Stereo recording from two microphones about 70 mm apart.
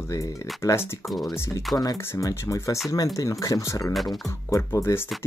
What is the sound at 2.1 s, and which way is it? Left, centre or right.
Speech, left.